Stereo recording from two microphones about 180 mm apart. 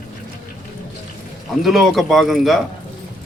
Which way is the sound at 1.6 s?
Centre (ahead or behind).